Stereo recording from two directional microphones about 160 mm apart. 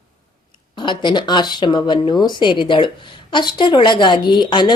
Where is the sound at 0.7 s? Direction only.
30° left (ahead or behind).